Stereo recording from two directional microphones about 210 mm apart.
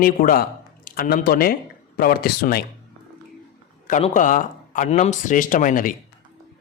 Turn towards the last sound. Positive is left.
turn(degrees=40)  # may be behind; listen again after turning